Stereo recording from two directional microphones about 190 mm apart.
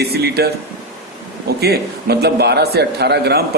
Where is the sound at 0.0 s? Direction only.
55° right (ahead or behind).